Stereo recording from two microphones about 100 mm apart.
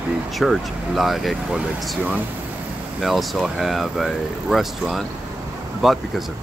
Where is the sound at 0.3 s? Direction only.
Centre (ahead or behind).